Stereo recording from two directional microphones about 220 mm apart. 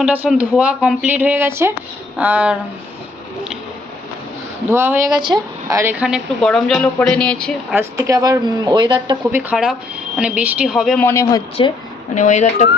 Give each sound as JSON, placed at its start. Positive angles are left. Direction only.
{"t": 0.0, "sound": "speech", "side_deg": -5}
{"t": 4.7, "sound": "a woman's voice", "side_deg": -10}
{"t": 7.8, "sound": "speech", "side_deg": -15}
{"t": 9.3, "sound": "a woman's voice", "side_deg": -5}
{"t": 11.0, "sound": "a man's voice", "side_deg": 10}
{"t": 12.1, "sound": "speech", "side_deg": 35}